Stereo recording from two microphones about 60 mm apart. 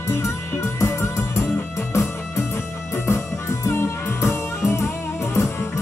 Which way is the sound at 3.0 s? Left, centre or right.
Left.